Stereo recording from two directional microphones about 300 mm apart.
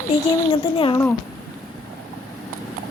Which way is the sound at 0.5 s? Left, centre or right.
Centre.